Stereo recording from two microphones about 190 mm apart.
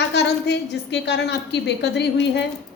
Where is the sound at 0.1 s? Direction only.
65° left (ahead or behind).